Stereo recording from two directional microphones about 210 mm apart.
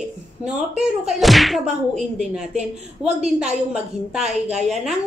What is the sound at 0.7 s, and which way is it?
Speech, centre (ahead or behind).